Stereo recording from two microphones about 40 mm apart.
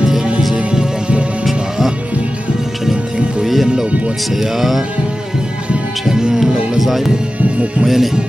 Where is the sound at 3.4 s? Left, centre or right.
Centre.